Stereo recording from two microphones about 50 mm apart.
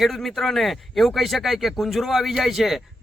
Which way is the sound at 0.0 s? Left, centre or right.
Centre.